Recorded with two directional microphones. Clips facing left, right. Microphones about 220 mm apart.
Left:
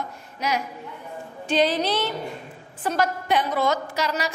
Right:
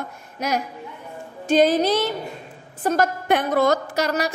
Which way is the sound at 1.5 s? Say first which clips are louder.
Right 5 dB; 45° right (ahead or behind).